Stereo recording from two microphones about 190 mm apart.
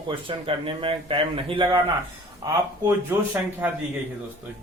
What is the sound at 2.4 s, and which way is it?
Speech, 15° right (ahead or behind).